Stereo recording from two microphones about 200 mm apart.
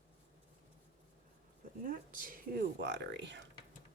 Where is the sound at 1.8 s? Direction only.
45° right (ahead or behind); by 3.4 s 60° right (ahead or behind).